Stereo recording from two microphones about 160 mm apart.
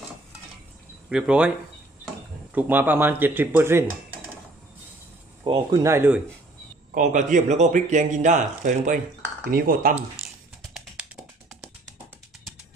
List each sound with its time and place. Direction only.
1.1 s speech: 5° right (ahead or behind)
2.5 s speech: 10° right (ahead or behind)
5.5 s speech: 30° right (ahead or behind)
5.8 s speech: 15° right (ahead or behind)
6.9 s speech: 50° right (ahead or behind)
9.4 s speech: 65° right (ahead or behind)